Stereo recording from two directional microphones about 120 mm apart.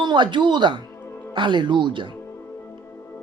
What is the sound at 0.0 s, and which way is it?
Speech, 40° right (ahead or behind).